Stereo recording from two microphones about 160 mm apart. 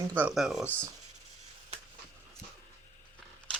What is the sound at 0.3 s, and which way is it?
Speech, centre (ahead or behind).